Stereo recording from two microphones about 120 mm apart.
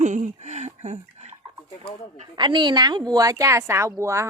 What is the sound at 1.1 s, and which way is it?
Bathtub, 65° right (ahead or behind).